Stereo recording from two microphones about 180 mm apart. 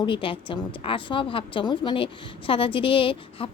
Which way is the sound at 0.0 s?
30° left (ahead or behind).